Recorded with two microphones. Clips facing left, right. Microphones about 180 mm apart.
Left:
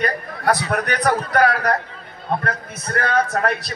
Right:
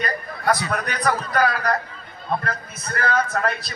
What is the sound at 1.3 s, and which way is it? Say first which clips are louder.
Speech: left 4 dB; 65° left (ahead or behind).